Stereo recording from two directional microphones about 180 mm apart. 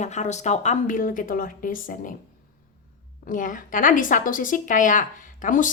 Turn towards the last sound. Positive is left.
turn(degrees=45)  # may be behind; listen again after turning